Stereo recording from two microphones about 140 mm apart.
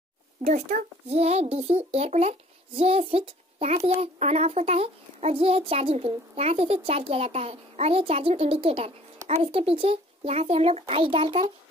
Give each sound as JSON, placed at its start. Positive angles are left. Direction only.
{"t": 0.4, "sound": "speech", "side_deg": -55}
{"t": 1.0, "sound": "a child's voice", "side_deg": -50}